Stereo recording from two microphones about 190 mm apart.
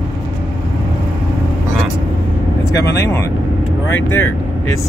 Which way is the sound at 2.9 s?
15° left (ahead or behind).